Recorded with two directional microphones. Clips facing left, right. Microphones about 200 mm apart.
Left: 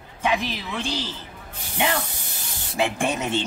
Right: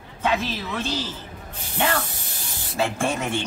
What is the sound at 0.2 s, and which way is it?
A woman's voice, 15° left (ahead or behind).